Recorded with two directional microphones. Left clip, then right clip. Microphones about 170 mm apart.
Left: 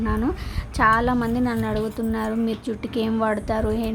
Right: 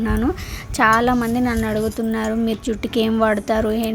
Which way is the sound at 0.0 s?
15° right (ahead or behind).